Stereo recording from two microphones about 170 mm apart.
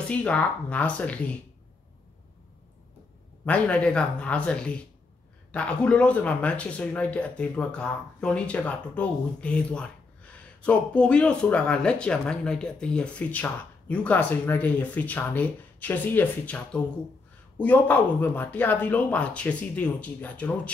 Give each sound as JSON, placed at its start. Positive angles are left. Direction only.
{"t": 0.1, "sound": "speech", "side_deg": 5}
{"t": 3.4, "sound": "speech", "side_deg": 5}